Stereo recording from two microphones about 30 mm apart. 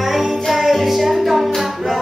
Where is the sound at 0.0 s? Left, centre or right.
Centre.